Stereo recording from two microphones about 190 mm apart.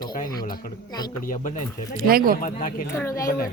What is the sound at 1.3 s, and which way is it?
Speech, 40° left (ahead or behind).